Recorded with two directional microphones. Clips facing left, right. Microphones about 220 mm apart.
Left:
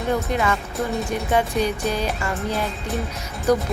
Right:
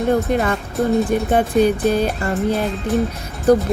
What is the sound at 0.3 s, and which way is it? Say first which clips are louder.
Speech: right 4 dB; 45° right (ahead or behind).